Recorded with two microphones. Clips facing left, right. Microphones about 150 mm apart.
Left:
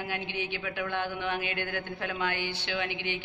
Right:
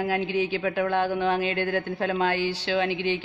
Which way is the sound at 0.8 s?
35° right (ahead or behind).